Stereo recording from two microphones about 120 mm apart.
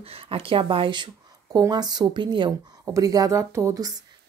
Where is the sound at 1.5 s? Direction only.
35° right (ahead or behind).